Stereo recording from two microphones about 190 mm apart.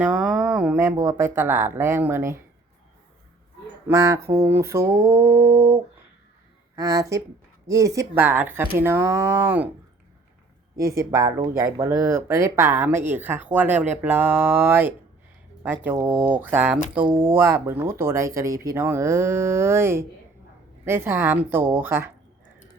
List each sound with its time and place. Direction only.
0.0 s speech: 5° right (ahead or behind)
3.8 s speech: 15° right (ahead or behind)
10.8 s speech: 15° right (ahead or behind)
17.1 s speech: 25° right (ahead or behind)
17.3 s speech: 10° right (ahead or behind)